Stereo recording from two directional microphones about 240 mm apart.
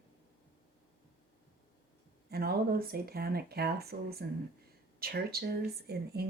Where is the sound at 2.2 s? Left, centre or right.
Right.